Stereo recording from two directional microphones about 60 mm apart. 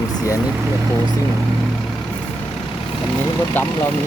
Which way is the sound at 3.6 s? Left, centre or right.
Left.